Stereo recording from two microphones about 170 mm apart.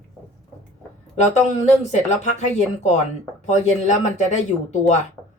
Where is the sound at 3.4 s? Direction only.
40° left (ahead or behind).